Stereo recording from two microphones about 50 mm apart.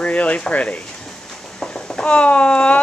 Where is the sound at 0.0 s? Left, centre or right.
Left.